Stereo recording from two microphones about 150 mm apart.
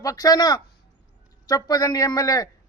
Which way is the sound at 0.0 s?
25° left (ahead or behind).